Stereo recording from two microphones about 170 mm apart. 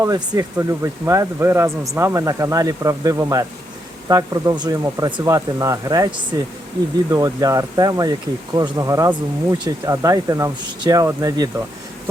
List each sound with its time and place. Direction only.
0.0 s speech: 20° right (ahead or behind)